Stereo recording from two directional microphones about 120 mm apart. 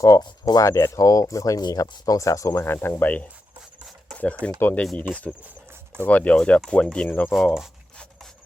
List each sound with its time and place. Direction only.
0.0 s speech: 30° left (ahead or behind)
6.1 s speech: 10° left (ahead or behind)
7.3 s speech: centre (ahead or behind)